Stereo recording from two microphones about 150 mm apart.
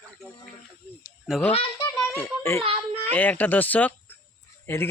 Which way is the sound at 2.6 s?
40° right (ahead or behind).